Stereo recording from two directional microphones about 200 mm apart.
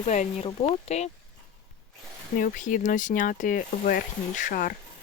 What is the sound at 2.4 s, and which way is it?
Speech, 40° left (ahead or behind).